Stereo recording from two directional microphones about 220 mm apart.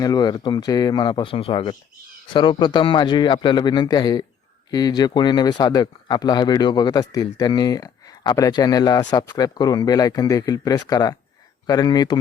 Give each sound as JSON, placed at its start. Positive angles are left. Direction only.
{"t": 0.0, "sound": "a man's voice", "side_deg": 15}